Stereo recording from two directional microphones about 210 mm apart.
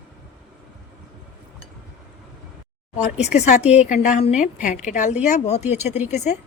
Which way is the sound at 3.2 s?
30° left (ahead or behind).